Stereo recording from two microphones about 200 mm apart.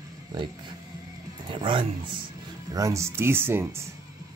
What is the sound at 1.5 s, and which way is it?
Speech, 25° right (ahead or behind).